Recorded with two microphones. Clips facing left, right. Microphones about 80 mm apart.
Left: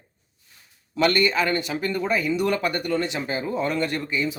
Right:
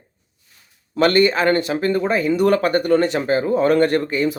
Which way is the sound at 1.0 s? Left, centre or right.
Right.